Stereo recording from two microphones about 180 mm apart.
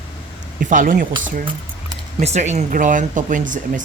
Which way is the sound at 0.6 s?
45° right (ahead or behind).